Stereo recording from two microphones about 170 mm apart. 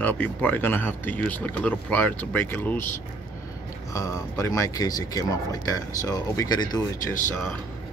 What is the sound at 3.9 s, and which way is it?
Speech, 20° left (ahead or behind).